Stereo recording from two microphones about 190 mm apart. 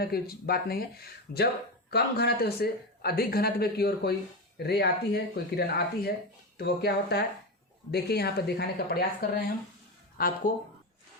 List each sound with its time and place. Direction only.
0.0 s speech: 55° left (ahead or behind)
10.2 s speech: 50° left (ahead or behind)